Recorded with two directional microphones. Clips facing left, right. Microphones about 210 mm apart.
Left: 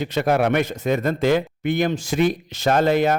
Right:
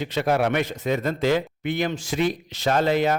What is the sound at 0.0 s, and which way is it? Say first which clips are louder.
A man's voice: left 3 dB; 50° left (ahead or behind).